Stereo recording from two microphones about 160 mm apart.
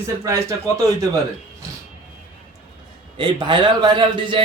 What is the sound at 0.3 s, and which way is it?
Speech, 20° right (ahead or behind).